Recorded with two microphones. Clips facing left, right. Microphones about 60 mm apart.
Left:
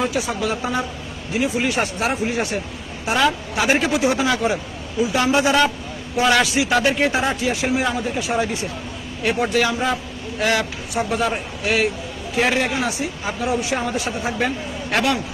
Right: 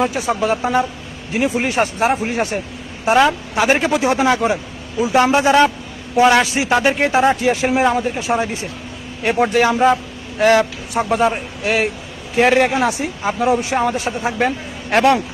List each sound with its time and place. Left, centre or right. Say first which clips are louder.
0.0 s a man's voice: right 4 dB; right
1.7 s a man's voice: right 5 dB; right
7.3 s a man's voice: right 5 dB; right
9.7 s a man's voice: right 8 dB; right